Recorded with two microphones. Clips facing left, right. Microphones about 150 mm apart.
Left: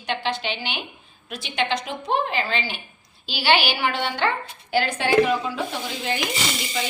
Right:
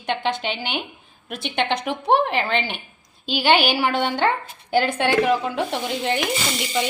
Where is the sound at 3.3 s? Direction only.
50° right (ahead or behind).